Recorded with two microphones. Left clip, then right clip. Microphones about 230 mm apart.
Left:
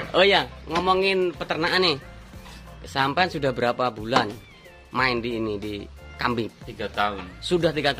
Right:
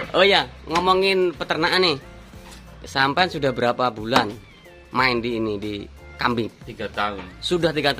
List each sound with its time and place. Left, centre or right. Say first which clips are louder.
0.1 s speech: right 2 dB; centre
6.7 s speech: left 1 dB; centre
7.4 s speech: right 2 dB; centre